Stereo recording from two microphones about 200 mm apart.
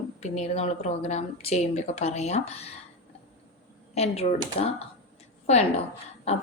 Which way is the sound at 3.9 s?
30° left (ahead or behind).